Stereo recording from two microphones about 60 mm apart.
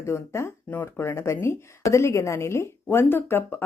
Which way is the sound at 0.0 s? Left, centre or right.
Left.